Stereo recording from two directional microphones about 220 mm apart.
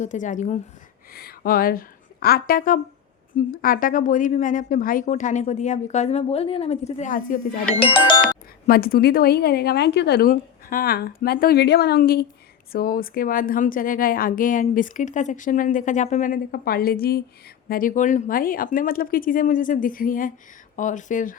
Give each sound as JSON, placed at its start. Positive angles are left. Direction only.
{"t": 0.0, "sound": "a woman's voice", "side_deg": 35}
{"t": 1.1, "sound": "a woman's voice", "side_deg": 45}
{"t": 8.6, "sound": "a woman's voice", "side_deg": 40}